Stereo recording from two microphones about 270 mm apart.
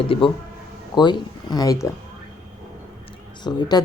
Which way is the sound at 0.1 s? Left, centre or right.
Centre.